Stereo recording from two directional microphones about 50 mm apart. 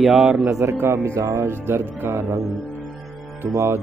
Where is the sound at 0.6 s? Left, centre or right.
Right.